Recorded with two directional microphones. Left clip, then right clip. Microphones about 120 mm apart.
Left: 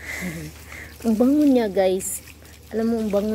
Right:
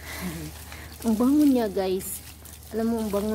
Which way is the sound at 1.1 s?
15° left (ahead or behind).